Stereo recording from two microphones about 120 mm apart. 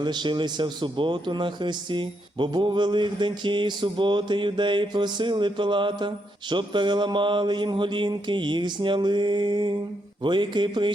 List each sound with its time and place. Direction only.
0.0 s speech: 40° right (ahead or behind)